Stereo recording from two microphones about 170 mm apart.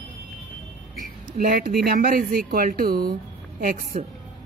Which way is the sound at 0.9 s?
55° right (ahead or behind).